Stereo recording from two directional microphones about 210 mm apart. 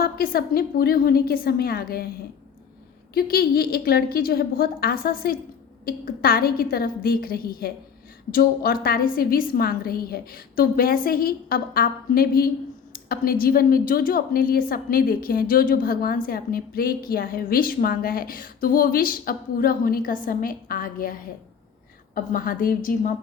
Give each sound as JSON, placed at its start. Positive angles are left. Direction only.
{"t": 0.0, "sound": "a woman's voice", "side_deg": 45}
{"t": 3.2, "sound": "a woman's voice", "side_deg": 45}